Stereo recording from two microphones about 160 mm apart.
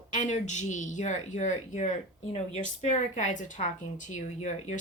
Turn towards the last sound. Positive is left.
turn(degrees=45)  # may be behind; listen again after turning